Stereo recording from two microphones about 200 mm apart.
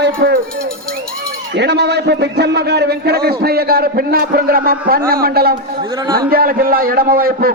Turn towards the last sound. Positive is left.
turn(degrees=-45)  # may be behind; listen again after turning